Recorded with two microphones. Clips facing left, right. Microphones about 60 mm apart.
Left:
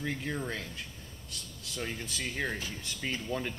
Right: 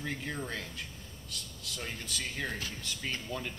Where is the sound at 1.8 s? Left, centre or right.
Centre.